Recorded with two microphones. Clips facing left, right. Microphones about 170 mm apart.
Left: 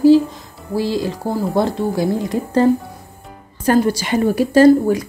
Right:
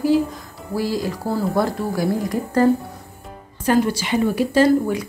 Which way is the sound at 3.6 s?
40° left (ahead or behind).